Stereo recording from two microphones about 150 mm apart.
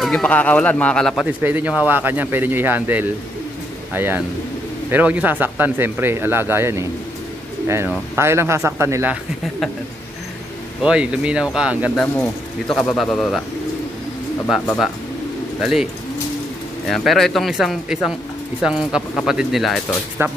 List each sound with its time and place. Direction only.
0.0 s speech: 5° left (ahead or behind)
1.4 s speech: 10° right (ahead or behind)
10.8 s speech: 5° right (ahead or behind)
12.0 s speech: 10° left (ahead or behind)
15.6 s speech: 5° right (ahead or behind)
20.2 s speech: 15° right (ahead or behind)